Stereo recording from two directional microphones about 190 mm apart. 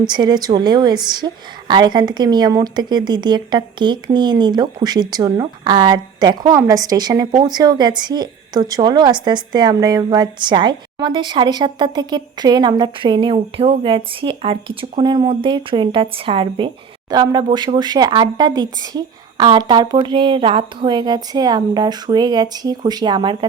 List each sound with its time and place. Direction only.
0.0 s a woman's voice: 25° right (ahead or behind)